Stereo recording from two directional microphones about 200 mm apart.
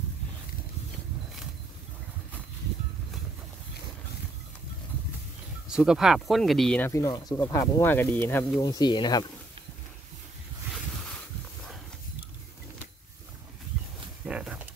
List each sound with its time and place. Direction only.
5.7 s speech: 5° right (ahead or behind)
6.9 s speech: 15° left (ahead or behind)
14.2 s a sound: 5° right (ahead or behind)